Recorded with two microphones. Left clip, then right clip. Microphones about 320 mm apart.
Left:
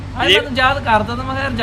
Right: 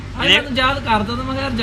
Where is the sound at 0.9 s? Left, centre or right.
Centre.